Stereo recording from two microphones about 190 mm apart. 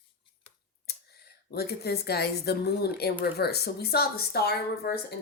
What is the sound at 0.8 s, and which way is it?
Speech, 55° left (ahead or behind).